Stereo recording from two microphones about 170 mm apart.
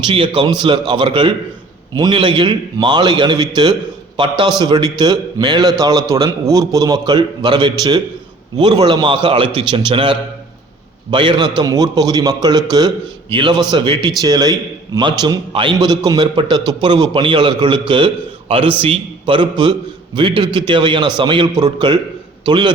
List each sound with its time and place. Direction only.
0.0 s a man's voice: 30° right (ahead or behind)